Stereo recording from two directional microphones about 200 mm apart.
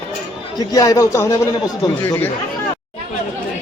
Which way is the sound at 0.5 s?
15° left (ahead or behind).